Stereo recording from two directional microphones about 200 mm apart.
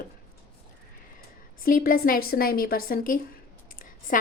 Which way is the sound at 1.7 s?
45° left (ahead or behind).